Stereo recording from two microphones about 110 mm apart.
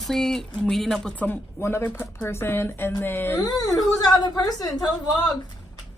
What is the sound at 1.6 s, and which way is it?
A woman's voice, 20° left (ahead or behind).